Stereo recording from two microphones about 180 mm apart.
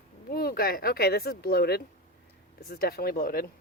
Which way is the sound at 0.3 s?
55° left (ahead or behind).